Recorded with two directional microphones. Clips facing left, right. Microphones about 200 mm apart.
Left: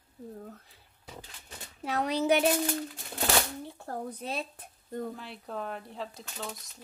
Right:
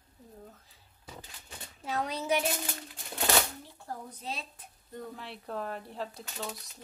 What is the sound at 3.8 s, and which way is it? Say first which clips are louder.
Speech: left 3 dB; 55° left (ahead or behind).